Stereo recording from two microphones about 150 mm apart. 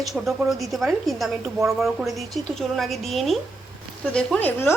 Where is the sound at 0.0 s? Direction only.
Centre (ahead or behind).